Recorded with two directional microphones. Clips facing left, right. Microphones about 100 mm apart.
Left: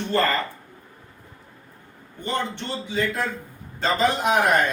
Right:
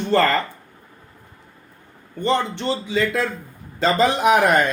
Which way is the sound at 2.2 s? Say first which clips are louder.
Right 7 dB; 90° right.